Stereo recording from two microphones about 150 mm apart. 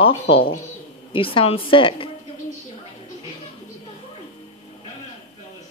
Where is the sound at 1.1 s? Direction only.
35° left (ahead or behind).